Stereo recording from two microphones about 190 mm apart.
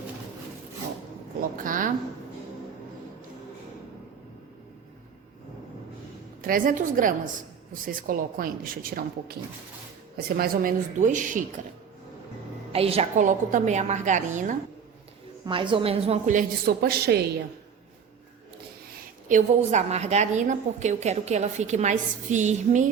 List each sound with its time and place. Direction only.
1.4 s speech: 45° right (ahead or behind)
6.4 s speech: 45° right (ahead or behind)
12.7 s a woman's voice: 30° right (ahead or behind)
15.4 s a woman's voice: 25° right (ahead or behind); by 17.2 s 55° right (ahead or behind)
19.3 s a woman's voice: 40° right (ahead or behind)